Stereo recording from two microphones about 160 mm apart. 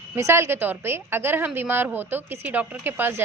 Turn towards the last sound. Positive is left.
turn(degrees=-10)  # may be behind; listen again after turning